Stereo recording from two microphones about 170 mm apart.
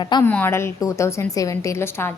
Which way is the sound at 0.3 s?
10° left (ahead or behind).